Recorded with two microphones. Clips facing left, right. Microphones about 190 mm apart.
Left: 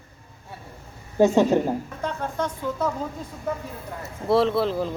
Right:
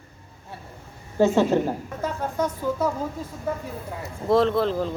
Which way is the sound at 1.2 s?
15° left (ahead or behind).